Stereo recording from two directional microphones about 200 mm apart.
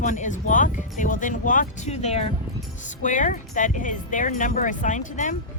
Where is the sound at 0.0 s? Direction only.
40° left (ahead or behind).